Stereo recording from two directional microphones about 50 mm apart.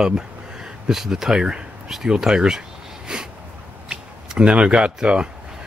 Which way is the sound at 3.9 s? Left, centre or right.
Centre.